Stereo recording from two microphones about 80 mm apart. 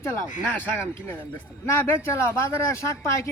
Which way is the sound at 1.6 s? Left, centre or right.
Left.